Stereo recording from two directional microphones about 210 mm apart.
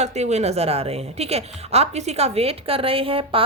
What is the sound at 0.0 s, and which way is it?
A woman's voice, 30° right (ahead or behind).